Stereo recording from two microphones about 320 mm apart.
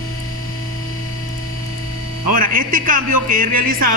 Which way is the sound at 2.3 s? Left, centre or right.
Right.